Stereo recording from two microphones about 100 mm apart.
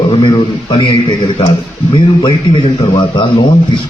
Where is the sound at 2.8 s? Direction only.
55° left (ahead or behind).